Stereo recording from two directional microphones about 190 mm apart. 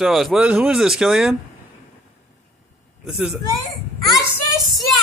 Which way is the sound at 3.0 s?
Centre (ahead or behind).